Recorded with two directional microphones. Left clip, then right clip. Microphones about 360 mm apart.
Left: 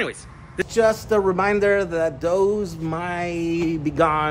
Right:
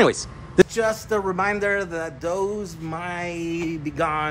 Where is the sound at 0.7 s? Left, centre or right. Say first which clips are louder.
Left 4 dB; centre.